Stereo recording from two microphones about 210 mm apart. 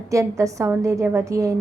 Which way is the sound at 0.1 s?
15° right (ahead or behind).